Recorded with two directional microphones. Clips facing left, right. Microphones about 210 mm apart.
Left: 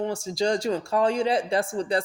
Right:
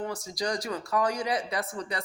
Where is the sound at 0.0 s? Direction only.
25° left (ahead or behind).